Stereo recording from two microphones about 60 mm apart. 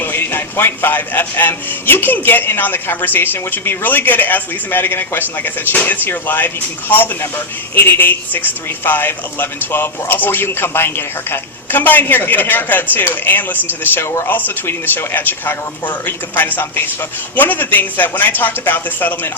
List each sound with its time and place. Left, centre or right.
0.0 s speech: left